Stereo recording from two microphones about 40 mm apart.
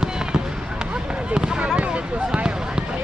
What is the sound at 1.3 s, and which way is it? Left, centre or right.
Fireworks, centre.